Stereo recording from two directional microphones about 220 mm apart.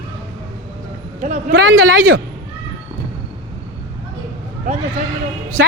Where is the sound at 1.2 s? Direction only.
30° right (ahead or behind).